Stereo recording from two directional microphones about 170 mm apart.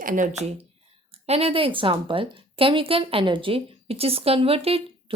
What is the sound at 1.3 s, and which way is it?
A woman's voice, 35° right (ahead or behind).